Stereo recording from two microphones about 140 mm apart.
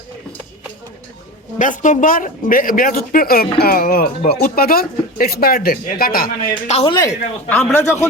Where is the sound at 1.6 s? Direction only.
65° left (ahead or behind); by 6.5 s 90° left.